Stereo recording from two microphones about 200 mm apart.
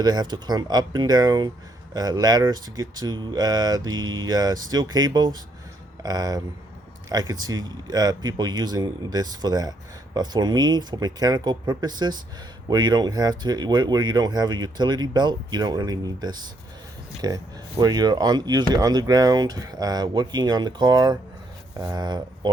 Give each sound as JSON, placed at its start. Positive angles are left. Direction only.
{"t": 0.0, "sound": "speech", "side_deg": -20}